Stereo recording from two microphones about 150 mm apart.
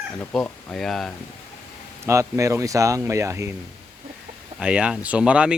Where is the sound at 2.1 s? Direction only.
20° right (ahead or behind).